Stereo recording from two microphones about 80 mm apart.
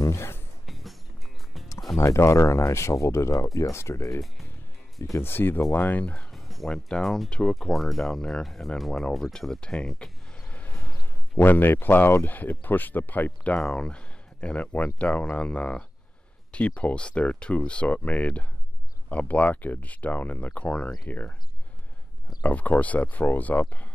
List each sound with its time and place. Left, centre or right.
0.0 s music: left
0.7 s music: centre
2.0 s speech: left
5.2 s speech: left
6.3 s music: centre
6.7 s speech: centre
11.3 s speech: left
13.6 s speech: centre
22.4 s speech: centre